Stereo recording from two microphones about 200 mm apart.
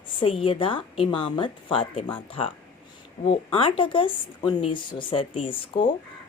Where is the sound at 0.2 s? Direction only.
25° left (ahead or behind).